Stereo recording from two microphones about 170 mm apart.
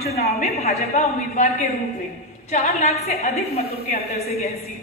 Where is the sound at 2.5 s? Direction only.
40° left (ahead or behind).